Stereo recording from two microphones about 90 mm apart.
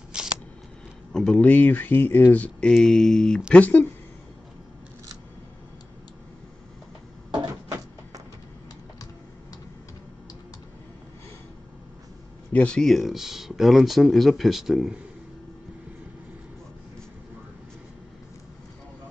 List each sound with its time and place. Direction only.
0.1 s a sound: 10° right (ahead or behind)
1.1 s speech: 10° left (ahead or behind)
2.7 s speech: 5° left (ahead or behind)
12.5 s speech: 10° left (ahead or behind)
12.8 s speech: centre (ahead or behind)